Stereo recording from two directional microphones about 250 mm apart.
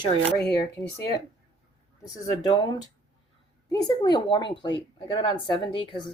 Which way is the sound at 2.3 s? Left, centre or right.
Centre.